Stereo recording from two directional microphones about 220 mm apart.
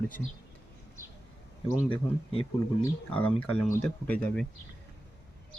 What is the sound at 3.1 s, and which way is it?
Speech, 5° left (ahead or behind).